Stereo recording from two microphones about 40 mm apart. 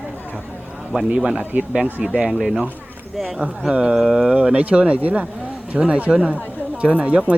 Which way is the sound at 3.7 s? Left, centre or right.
Right.